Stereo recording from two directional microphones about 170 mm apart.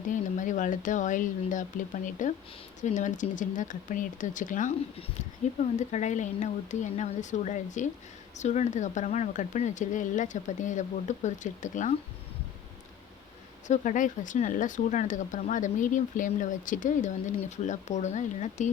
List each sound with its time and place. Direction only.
0.1 s speech: 50° left (ahead or behind)
5.7 s speech: 45° left (ahead or behind)
13.7 s speech: 50° left (ahead or behind)